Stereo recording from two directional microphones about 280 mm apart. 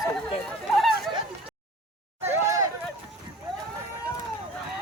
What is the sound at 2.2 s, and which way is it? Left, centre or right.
Hubbub, centre.